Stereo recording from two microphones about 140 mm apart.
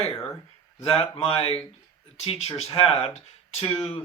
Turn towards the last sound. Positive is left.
turn(degrees=50)  # may be behind; listen again after turning